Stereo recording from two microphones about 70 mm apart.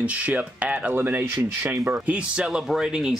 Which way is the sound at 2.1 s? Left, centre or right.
Centre.